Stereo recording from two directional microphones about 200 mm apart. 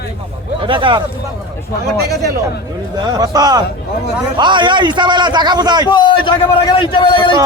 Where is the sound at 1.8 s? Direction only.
55° right (ahead or behind).